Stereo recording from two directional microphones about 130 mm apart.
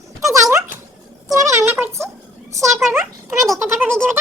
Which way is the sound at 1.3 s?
25° right (ahead or behind).